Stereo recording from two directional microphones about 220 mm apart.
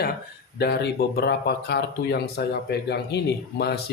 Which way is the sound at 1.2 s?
50° left (ahead or behind).